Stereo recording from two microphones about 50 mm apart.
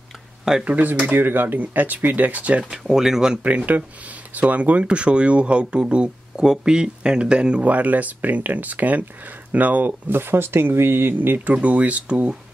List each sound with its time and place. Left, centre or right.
0.7 s speech: right
1.0 s speech: right
2.7 s speech: centre
3.4 s speech: right
12.1 s speech: centre